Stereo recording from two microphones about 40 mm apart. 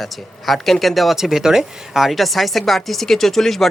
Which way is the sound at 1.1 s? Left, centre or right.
Centre.